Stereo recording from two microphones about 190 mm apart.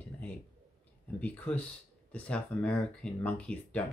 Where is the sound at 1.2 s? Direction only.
10° left (ahead or behind).